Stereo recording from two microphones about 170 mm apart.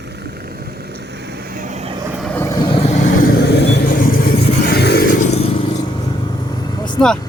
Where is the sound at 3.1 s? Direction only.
60° left (ahead or behind); by 3.8 s 85° left.